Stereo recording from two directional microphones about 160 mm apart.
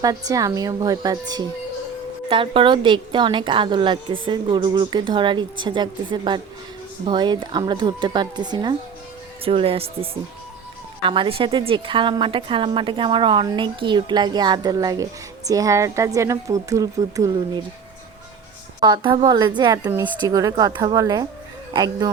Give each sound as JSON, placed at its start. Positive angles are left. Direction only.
{"t": 0.0, "sound": "a woman's voice", "side_deg": -20}
{"t": 18.8, "sound": "a woman's voice", "side_deg": -25}